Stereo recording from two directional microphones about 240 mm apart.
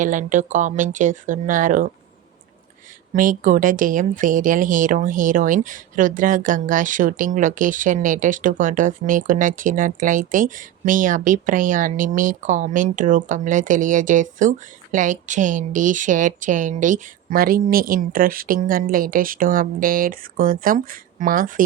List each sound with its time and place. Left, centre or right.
0.0 s speech: right
3.1 s speech: right